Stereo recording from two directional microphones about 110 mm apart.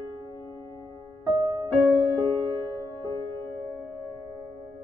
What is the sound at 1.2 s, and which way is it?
Music, 40° right (ahead or behind).